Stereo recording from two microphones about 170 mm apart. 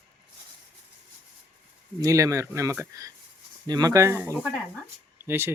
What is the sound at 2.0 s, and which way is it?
Speech, 20° right (ahead or behind).